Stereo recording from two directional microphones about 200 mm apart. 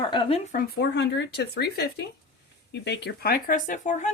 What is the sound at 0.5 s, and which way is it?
Speech, 55° left (ahead or behind).